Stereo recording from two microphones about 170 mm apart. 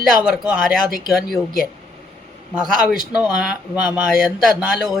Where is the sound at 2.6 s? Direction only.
5° right (ahead or behind).